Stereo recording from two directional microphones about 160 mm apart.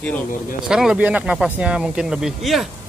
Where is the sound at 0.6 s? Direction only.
5° right (ahead or behind).